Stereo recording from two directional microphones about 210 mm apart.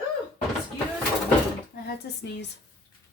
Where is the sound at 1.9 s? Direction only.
55° left (ahead or behind).